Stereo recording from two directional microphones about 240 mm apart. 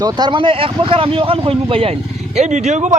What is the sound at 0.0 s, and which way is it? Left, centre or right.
Speech, centre.